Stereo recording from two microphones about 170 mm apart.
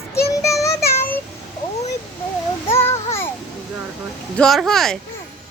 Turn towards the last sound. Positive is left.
turn(degrees=5)  # may be behind; listen again after turning